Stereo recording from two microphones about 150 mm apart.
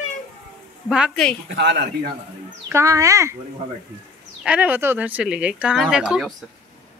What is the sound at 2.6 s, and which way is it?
Speech, 20° right (ahead or behind).